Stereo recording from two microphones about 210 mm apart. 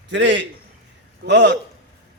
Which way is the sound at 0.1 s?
60° right (ahead or behind).